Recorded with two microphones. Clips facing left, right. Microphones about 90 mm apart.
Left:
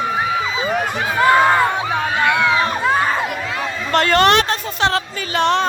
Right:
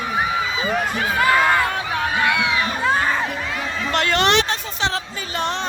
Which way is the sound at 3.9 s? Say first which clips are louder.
Left 5 dB; 45° left (ahead or behind).